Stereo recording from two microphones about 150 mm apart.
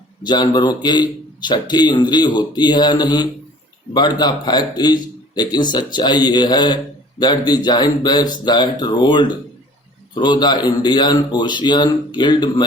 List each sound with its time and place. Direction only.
0.2 s a man's voice: 30° left (ahead or behind)